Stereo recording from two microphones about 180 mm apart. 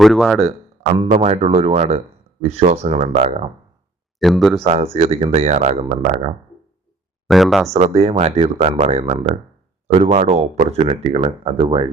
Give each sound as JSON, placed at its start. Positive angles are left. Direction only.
{"t": 0.0, "sound": "speech", "side_deg": 0}
{"t": 1.0, "sound": "speech", "side_deg": -40}
{"t": 4.2, "sound": "speech", "side_deg": 0}
{"t": 4.6, "sound": "speech", "side_deg": -40}
{"t": 7.3, "sound": "speech", "side_deg": 0}
{"t": 7.7, "sound": "speech", "side_deg": -35}